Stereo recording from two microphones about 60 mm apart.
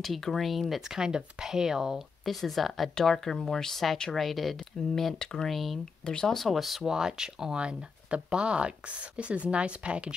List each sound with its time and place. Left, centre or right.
0.0 s speech: centre